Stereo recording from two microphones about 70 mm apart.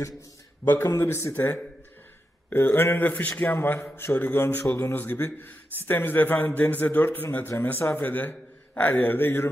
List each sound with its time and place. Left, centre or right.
0.8 s a man's voice: left